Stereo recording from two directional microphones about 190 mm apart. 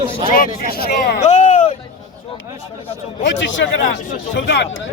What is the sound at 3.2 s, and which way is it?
Speech, 75° left (ahead or behind).